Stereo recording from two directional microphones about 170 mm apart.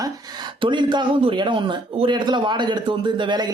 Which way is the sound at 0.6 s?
25° right (ahead or behind).